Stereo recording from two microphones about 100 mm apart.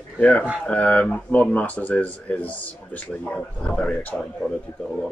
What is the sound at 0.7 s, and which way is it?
Speech, 15° left (ahead or behind).